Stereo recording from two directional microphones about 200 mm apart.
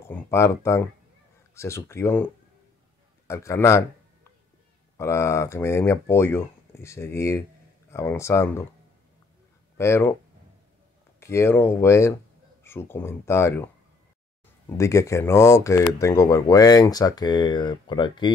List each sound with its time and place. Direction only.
0.0 s speech: 10° left (ahead or behind)
4.9 s speech: 15° left (ahead or behind)
9.8 s speech: 10° left (ahead or behind)
11.1 s speech: 15° left (ahead or behind)
14.8 s speech: 15° left (ahead or behind)